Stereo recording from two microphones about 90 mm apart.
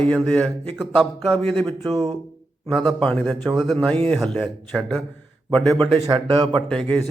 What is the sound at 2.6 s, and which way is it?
Speech, centre (ahead or behind).